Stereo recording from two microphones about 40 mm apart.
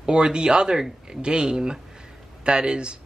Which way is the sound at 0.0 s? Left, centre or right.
Right.